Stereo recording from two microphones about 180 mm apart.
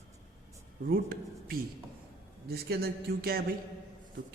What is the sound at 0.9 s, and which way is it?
A man's voice, 55° right (ahead or behind).